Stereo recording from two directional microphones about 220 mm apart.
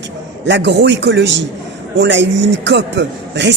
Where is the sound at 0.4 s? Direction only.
50° right (ahead or behind).